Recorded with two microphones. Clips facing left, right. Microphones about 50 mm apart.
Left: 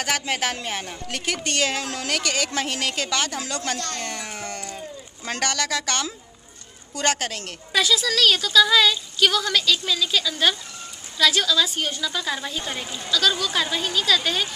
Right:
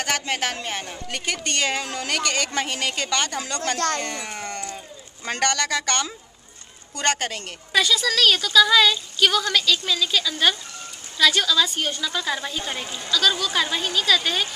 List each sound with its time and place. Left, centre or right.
0.0 s a woman's voice: centre
3.7 s speech: right
4.0 s a woman's voice: centre